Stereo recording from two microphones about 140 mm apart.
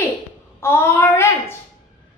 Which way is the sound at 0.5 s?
15° left (ahead or behind).